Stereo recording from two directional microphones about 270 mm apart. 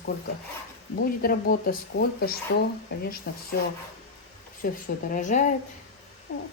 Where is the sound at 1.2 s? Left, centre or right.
Left.